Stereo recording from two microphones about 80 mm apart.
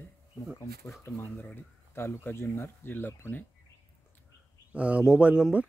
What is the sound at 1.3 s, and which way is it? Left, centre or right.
Speech, left.